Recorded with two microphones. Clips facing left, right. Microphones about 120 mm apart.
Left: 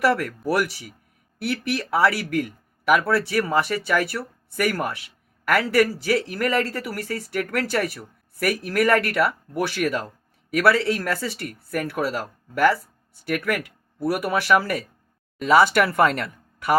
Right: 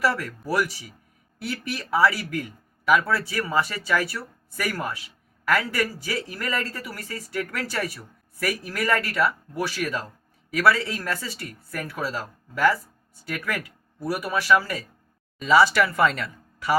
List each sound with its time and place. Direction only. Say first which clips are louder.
0.0 s speech: left 4 dB; 60° left (ahead or behind)
13.2 s speech: left 6 dB; 65° left (ahead or behind)